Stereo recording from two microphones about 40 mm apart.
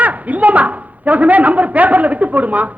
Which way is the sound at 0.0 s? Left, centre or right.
Right.